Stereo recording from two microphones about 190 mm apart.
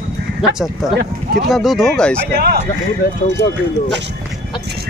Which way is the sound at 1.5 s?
Centre (ahead or behind).